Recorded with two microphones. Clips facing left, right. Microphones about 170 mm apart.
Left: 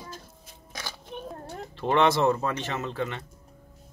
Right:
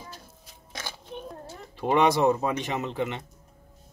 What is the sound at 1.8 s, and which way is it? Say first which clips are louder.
Speech: right 1 dB; 15° right (ahead or behind).